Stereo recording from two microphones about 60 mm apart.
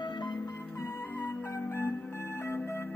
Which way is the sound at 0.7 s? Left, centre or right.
Left.